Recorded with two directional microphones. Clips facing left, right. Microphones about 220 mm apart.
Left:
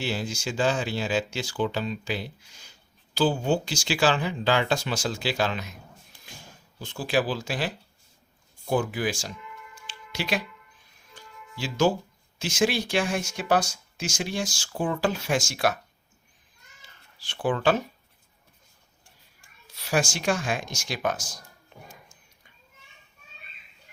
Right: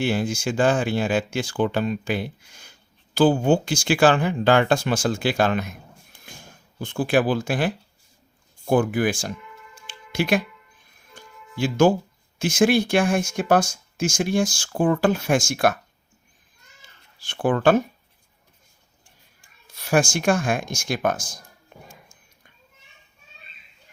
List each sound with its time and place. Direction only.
0.0 s speech: 50° right (ahead or behind)
6.1 s a sound: 50° right (ahead or behind)
8.6 s speech: 50° right (ahead or behind)
9.8 s music: 50° right (ahead or behind)
12.4 s speech: 50° right (ahead or behind)
17.2 s speech: 50° right (ahead or behind)
19.6 s speech: 50° right (ahead or behind)
21.7 s music: 50° right (ahead or behind)